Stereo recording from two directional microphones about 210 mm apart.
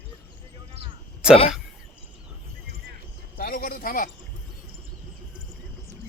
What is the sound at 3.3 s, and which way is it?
Speech, 45° left (ahead or behind).